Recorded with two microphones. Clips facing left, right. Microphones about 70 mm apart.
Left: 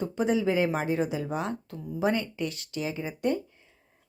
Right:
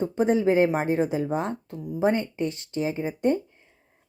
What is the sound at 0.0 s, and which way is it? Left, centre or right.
A woman's voice, right.